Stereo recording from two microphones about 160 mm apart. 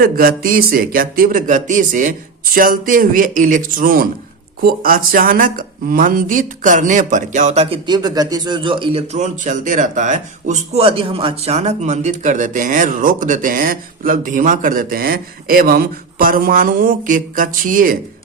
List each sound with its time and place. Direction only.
0.0 s speech: 65° right (ahead or behind); by 7.8 s 40° right (ahead or behind)
7.9 s a man's voice: 25° right (ahead or behind); by 17.9 s 55° right (ahead or behind)